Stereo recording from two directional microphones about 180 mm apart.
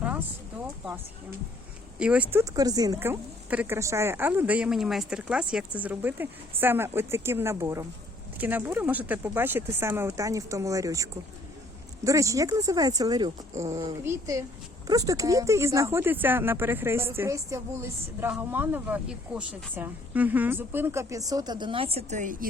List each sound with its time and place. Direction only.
2.0 s speech: 5° right (ahead or behind); by 22.4 s 45° right (ahead or behind)